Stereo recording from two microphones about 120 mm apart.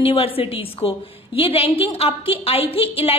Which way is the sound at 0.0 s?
50° left (ahead or behind).